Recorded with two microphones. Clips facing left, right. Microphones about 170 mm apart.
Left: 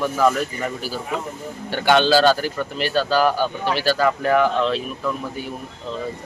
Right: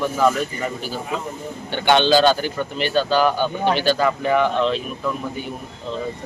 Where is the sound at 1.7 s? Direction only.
5° left (ahead or behind).